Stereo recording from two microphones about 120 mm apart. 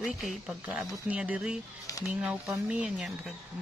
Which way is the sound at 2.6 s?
5° right (ahead or behind).